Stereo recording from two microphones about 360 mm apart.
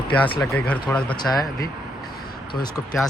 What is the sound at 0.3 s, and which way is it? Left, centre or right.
Speech, centre.